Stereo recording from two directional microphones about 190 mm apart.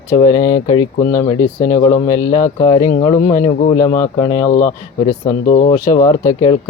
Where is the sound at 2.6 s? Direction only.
25° left (ahead or behind).